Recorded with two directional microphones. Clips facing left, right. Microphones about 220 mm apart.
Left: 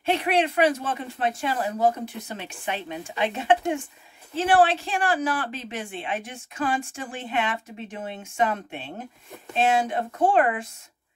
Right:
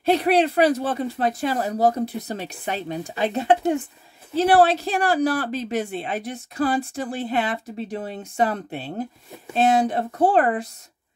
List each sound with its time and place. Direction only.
0.0 s speech: 35° right (ahead or behind)